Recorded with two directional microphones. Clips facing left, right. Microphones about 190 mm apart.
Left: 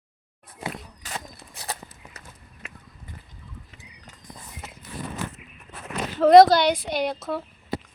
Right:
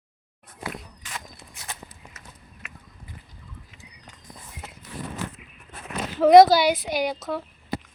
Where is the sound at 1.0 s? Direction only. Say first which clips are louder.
Left 3 dB; 35° left (ahead or behind).